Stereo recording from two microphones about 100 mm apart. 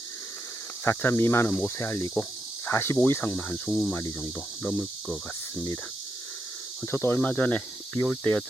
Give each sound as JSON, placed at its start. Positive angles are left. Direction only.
{"t": 0.9, "sound": "speech", "side_deg": 25}
{"t": 3.7, "sound": "speech", "side_deg": 0}
{"t": 6.8, "sound": "speech", "side_deg": 25}
{"t": 7.2, "sound": "speech", "side_deg": 15}